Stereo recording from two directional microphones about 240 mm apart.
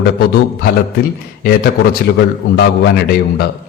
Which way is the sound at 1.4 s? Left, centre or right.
Left.